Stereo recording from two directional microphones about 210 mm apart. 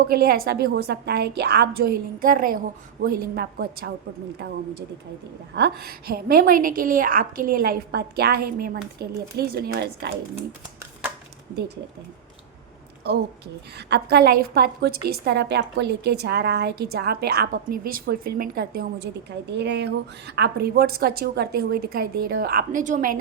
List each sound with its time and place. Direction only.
0.0 s a woman's voice: 45° right (ahead or behind)
5.5 s a woman's voice: 50° right (ahead or behind)
13.7 s a woman's voice: 50° right (ahead or behind)